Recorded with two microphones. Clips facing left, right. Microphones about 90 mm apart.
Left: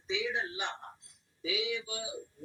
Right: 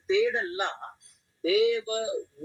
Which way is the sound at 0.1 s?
55° right (ahead or behind).